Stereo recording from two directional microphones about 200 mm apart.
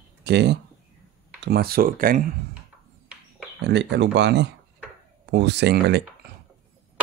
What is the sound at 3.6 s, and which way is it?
Speech, 60° right (ahead or behind).